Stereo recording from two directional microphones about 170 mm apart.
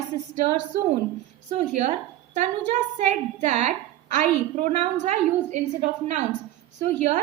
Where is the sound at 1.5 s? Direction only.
40° right (ahead or behind).